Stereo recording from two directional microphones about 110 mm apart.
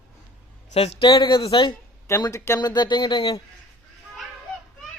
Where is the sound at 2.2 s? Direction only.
35° left (ahead or behind).